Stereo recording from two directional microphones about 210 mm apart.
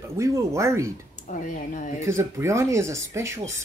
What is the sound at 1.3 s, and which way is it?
Speech, 35° left (ahead or behind).